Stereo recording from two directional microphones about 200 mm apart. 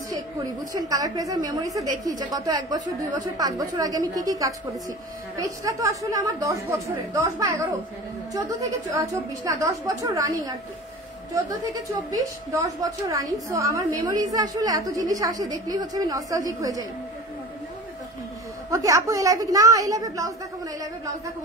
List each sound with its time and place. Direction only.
0.7 s a woman's voice: 20° right (ahead or behind)
12.1 s a woman's voice: 15° right (ahead or behind)
18.7 s a woman's voice: 15° right (ahead or behind)